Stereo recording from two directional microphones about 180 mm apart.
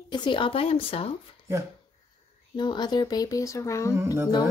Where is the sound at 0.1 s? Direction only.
25° left (ahead or behind).